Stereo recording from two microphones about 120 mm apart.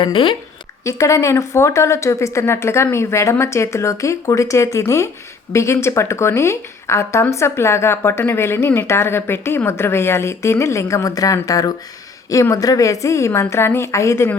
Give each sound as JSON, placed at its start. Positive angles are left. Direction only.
{"t": 0.0, "sound": "a woman's voice", "side_deg": 45}
{"t": 0.9, "sound": "speech", "side_deg": 25}